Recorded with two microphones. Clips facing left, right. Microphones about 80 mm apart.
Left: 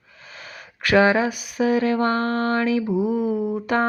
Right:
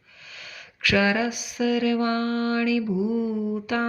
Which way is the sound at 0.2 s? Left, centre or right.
Left.